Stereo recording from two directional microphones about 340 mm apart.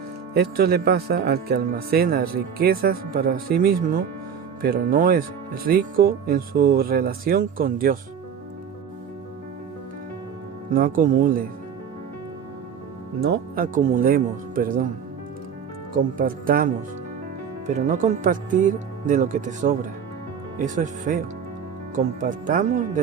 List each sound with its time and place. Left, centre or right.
0.3 s speech: right
10.7 s speech: right
13.2 s speech: right
16.1 s speech: right